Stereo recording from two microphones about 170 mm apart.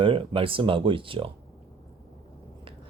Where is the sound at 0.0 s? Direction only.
30° right (ahead or behind).